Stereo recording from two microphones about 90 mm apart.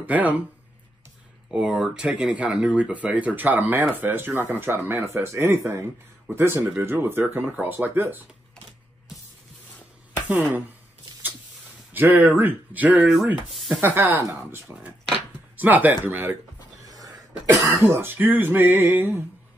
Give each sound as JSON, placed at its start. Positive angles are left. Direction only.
{"t": 0.0, "sound": "speech", "side_deg": -15}
{"t": 1.5, "sound": "speech", "side_deg": -10}
{"t": 10.1, "sound": "a sound", "side_deg": -20}
{"t": 11.9, "sound": "speech", "side_deg": -25}
{"t": 16.8, "sound": "a sound", "side_deg": -40}
{"t": 17.8, "sound": "speech", "side_deg": -25}